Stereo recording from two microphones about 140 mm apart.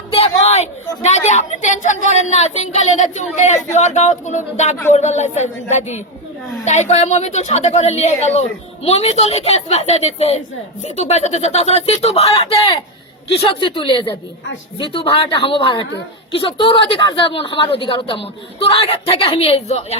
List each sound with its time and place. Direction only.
0.1 s a woman's voice: 50° left (ahead or behind)